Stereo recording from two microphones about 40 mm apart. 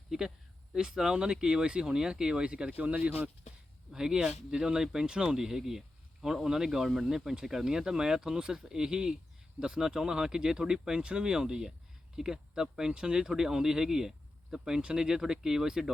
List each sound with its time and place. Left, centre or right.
0.7 s speech: centre; by 3.2 s right
3.9 s speech: centre
5.4 s speech: centre
12.9 s speech: right
13.1 s speech: centre